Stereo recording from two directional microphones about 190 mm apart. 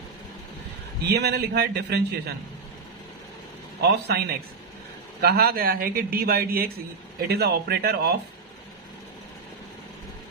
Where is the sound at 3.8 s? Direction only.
60° right (ahead or behind).